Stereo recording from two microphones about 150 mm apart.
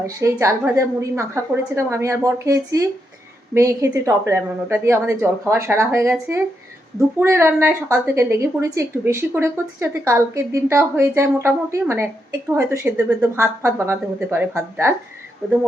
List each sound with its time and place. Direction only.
0.0 s a woman's voice: 20° right (ahead or behind)